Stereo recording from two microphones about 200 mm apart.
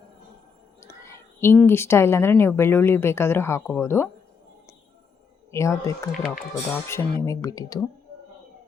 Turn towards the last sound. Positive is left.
turn(degrees=20)  # may be behind; listen again after turning